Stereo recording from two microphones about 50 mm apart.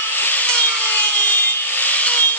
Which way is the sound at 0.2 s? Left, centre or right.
Left.